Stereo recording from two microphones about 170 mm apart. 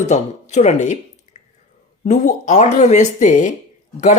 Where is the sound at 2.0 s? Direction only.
45° left (ahead or behind).